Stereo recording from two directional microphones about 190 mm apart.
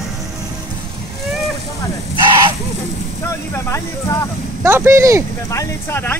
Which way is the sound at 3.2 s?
15° left (ahead or behind).